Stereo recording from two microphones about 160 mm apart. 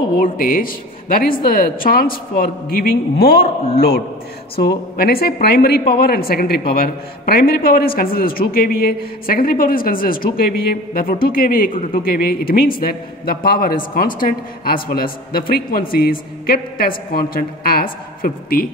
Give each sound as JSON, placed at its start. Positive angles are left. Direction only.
{"t": 0.2, "sound": "a man's voice", "side_deg": 60}
{"t": 4.9, "sound": "a man's voice", "side_deg": 70}